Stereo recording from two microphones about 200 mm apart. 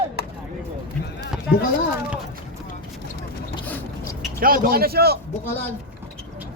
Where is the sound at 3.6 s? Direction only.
10° left (ahead or behind).